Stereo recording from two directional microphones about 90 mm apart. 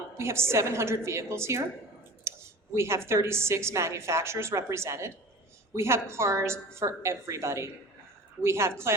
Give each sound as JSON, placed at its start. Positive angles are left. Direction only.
{"t": 0.1, "sound": "a woman's voice", "side_deg": -30}